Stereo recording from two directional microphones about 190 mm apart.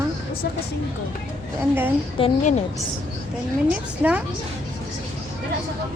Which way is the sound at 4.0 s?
10° right (ahead or behind).